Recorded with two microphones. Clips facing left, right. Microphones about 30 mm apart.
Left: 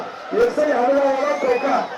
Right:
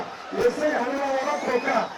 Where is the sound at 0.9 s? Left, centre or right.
Left.